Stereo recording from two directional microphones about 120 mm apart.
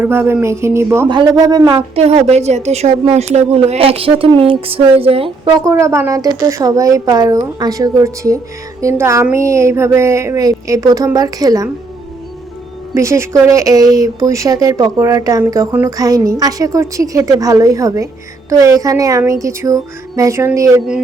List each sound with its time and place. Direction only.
0.0 s a woman's voice: 20° right (ahead or behind)
1.0 s speech: 35° right (ahead or behind)
2.0 s a woman's voice: 60° right (ahead or behind)
5.7 s a woman's voice: 20° right (ahead or behind)
12.9 s a woman's voice: 25° right (ahead or behind)